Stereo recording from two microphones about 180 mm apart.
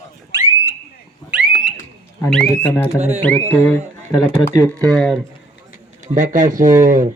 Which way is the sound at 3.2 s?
10° left (ahead or behind).